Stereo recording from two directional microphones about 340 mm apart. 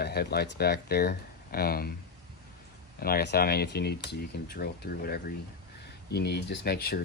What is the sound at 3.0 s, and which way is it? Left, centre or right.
Speech, left.